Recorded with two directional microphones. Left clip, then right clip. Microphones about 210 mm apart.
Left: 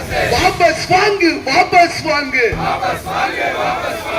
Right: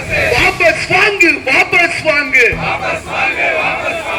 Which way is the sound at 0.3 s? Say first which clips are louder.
Right 1 dB; 60° left (ahead or behind).